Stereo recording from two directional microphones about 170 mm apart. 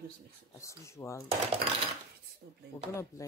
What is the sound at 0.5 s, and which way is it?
Speech, 15° left (ahead or behind).